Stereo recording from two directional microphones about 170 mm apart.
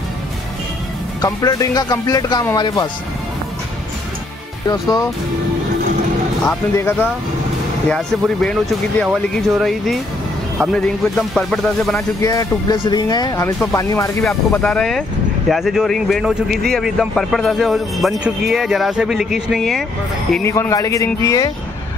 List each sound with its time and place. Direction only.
1.2 s speech: 20° left (ahead or behind)
4.6 s speech: 20° left (ahead or behind)
6.4 s speech: 10° left (ahead or behind)
12.2 s speech: 20° left (ahead or behind)
14.2 s speech: 5° left (ahead or behind)
20.4 s speech: 15° left (ahead or behind)